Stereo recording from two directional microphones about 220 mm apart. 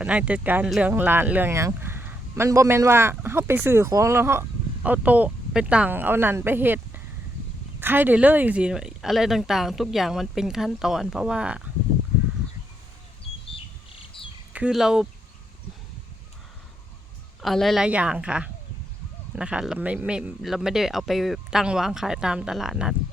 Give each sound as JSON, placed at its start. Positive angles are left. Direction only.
{"t": 0.0, "sound": "speech", "side_deg": -5}
{"t": 14.5, "sound": "speech", "side_deg": -5}
{"t": 17.4, "sound": "speech", "side_deg": 0}